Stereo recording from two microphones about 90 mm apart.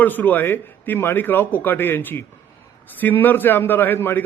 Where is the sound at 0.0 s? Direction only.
20° left (ahead or behind).